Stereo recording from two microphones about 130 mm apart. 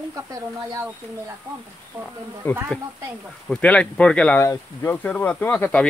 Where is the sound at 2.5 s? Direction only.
15° left (ahead or behind).